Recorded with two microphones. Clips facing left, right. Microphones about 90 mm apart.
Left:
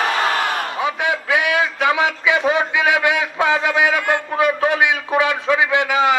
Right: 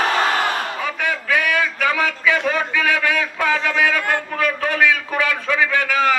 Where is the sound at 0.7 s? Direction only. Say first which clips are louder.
Left 3 dB; 20° left (ahead or behind).